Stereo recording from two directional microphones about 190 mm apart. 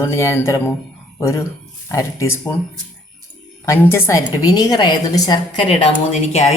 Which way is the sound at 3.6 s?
15° left (ahead or behind).